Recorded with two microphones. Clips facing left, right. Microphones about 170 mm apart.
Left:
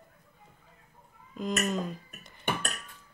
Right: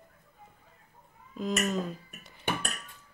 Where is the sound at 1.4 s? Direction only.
Centre (ahead or behind).